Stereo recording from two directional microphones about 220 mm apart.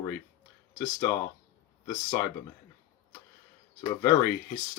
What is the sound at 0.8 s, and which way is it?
Speech, 10° left (ahead or behind).